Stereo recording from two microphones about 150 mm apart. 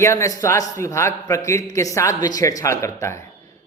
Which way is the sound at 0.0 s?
20° left (ahead or behind).